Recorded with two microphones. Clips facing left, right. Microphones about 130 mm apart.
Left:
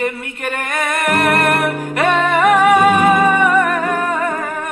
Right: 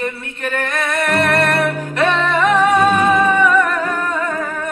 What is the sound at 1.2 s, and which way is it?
Music, 55° left (ahead or behind).